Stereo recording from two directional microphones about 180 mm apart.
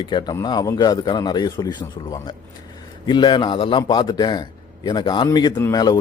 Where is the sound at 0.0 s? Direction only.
25° left (ahead or behind).